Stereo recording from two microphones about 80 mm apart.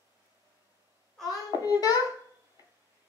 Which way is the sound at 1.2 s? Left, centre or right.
Left.